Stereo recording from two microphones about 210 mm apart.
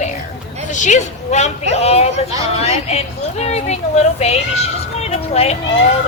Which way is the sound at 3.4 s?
30° left (ahead or behind).